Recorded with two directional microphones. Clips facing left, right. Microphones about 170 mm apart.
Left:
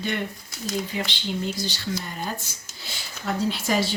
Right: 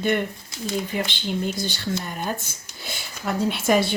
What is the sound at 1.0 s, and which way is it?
Speech, 50° right (ahead or behind).